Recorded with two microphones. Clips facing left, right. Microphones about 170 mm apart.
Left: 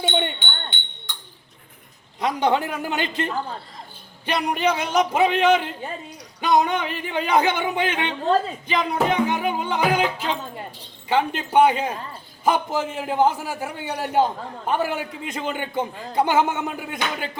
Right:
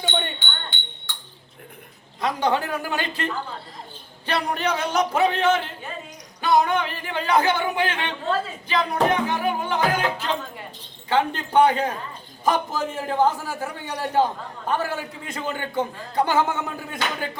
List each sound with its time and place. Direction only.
0.0 s jingle bell: 20° left (ahead or behind)
2.2 s a man's voice: 20° left (ahead or behind)